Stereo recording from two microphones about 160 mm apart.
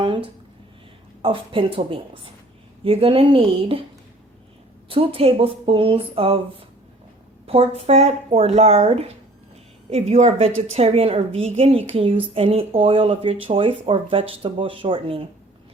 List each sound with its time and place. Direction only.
0.0 s a sound: 30° right (ahead or behind)
1.2 s speech: 35° right (ahead or behind)
4.9 s speech: 35° right (ahead or behind)
7.4 s speech: 40° right (ahead or behind)